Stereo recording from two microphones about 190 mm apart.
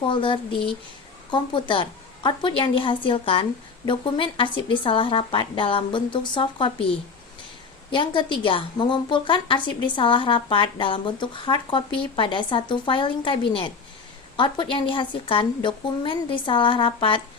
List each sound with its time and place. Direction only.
0.0 s a woman's voice: 25° left (ahead or behind)